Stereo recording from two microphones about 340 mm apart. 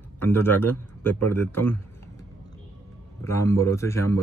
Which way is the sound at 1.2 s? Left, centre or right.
Right.